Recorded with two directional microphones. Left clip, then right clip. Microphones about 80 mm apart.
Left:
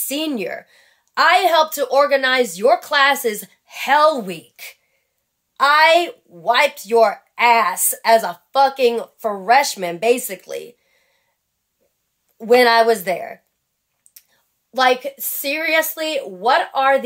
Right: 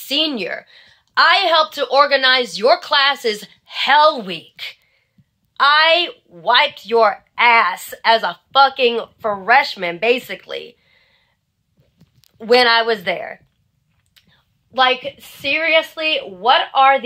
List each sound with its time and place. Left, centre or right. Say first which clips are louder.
0.1 s a woman's voice: right 4 dB; left
12.4 s a woman's voice: even; left
14.3 s a woman's voice: right 2 dB; left
15.5 s a woman's voice: right 3 dB; left